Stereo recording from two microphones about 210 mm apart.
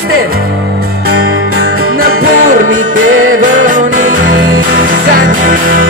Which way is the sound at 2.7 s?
70° right (ahead or behind).